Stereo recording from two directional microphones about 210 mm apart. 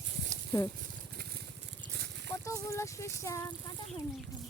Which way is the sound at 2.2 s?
15° left (ahead or behind).